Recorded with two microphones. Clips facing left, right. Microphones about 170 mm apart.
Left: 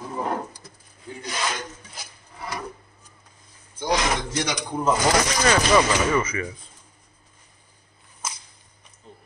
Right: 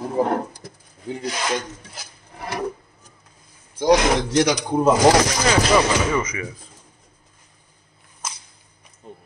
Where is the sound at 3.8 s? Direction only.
75° right (ahead or behind).